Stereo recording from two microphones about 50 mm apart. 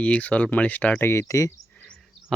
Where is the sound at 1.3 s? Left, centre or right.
Left.